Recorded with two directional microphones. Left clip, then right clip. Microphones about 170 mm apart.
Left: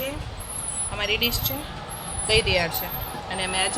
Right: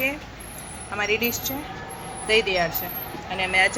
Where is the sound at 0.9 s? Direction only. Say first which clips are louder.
Right 1 dB; 10° right (ahead or behind).